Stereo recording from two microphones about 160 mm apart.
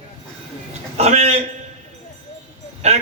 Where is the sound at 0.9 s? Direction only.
40° right (ahead or behind).